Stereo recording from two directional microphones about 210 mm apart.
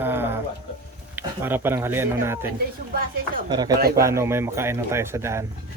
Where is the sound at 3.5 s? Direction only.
20° right (ahead or behind).